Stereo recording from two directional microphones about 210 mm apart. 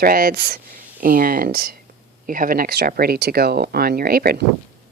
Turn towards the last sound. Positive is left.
turn(degrees=-45)  # may be behind; listen again after turning